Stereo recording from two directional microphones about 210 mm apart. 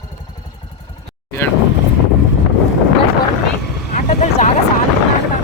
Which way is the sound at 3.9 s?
35° left (ahead or behind).